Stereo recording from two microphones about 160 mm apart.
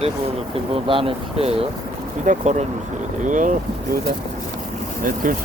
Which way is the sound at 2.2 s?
45° right (ahead or behind).